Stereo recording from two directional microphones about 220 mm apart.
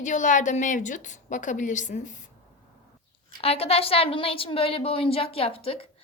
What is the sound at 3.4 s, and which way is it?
A woman's voice, 25° left (ahead or behind).